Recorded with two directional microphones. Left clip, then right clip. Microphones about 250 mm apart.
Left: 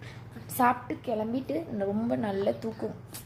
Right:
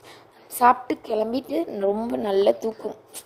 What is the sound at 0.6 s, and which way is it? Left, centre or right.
A woman's voice, right.